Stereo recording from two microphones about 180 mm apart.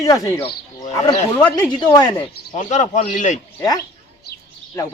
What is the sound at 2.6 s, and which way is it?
Speech, 40° left (ahead or behind).